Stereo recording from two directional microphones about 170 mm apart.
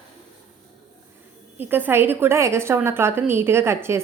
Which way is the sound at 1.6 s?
10° right (ahead or behind).